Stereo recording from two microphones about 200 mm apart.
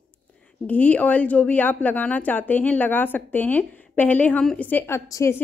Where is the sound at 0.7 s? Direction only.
10° left (ahead or behind).